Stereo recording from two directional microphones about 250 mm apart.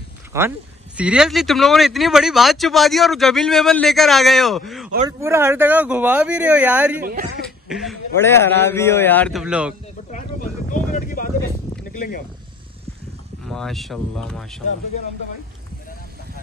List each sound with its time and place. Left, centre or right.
0.3 s speech: centre
5.0 s speech: centre
8.2 s a man's voice: centre
10.1 s vehicle: left
13.5 s speech: centre